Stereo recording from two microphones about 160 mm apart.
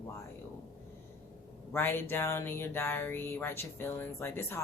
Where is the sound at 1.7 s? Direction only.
15° left (ahead or behind).